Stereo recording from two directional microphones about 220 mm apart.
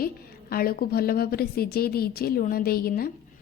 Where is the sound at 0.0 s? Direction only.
40° left (ahead or behind).